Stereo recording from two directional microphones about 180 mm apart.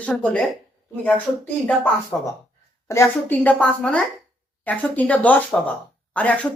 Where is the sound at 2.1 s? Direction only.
15° left (ahead or behind).